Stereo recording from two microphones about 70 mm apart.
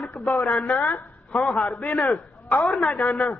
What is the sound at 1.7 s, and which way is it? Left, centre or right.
A man's voice, centre.